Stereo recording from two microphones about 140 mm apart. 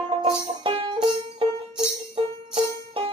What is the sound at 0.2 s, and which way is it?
Music, 35° right (ahead or behind).